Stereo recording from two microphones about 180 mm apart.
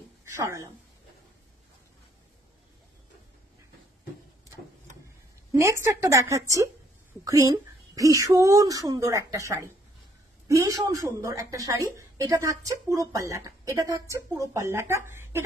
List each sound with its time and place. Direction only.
0.2 s a woman's voice: 15° right (ahead or behind)
5.5 s a woman's voice: 15° right (ahead or behind)
10.5 s a woman's voice: 20° right (ahead or behind)